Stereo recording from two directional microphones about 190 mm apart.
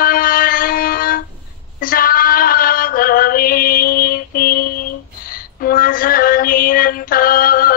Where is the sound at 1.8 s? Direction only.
50° left (ahead or behind).